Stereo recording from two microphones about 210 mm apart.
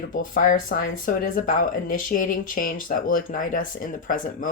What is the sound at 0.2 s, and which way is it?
Speech, 40° left (ahead or behind).